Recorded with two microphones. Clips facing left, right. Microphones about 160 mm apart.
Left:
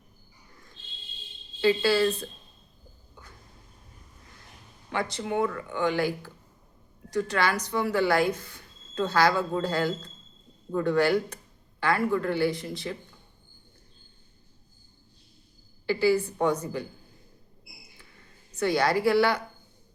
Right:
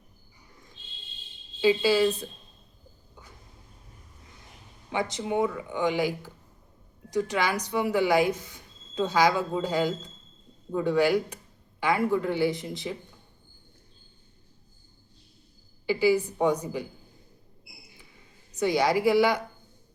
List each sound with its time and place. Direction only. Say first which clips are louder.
1.6 s speech: right 1 dB; 15° right (ahead or behind)
4.9 s speech: right 1 dB; 15° right (ahead or behind)
15.9 s speech: even; 15° right (ahead or behind)
18.5 s speech: right 1 dB; 15° right (ahead or behind)